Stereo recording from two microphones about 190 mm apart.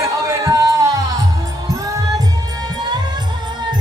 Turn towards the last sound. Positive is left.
turn(degrees=-20)  # may be behind; listen again after turning